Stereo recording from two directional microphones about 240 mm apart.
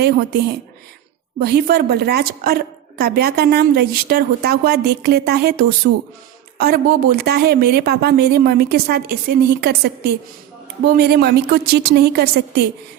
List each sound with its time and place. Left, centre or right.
0.0 s a woman's voice: right